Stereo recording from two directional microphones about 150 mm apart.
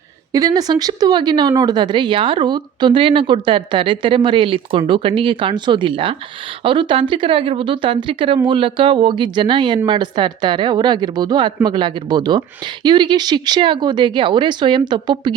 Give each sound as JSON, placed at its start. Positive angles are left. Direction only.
{"t": 0.3, "sound": "speech", "side_deg": -25}